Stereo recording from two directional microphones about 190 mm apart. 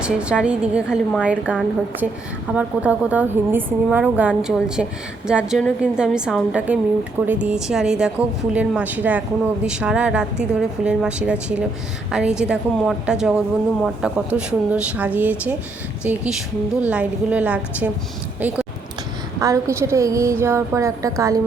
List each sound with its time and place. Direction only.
0.0 s a woman's voice: 5° right (ahead or behind)